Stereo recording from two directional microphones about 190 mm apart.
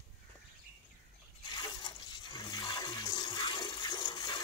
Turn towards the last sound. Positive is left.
turn(degrees=20)  # may be behind; listen again after turning